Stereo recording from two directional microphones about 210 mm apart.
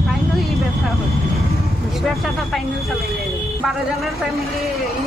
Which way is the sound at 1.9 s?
Centre (ahead or behind).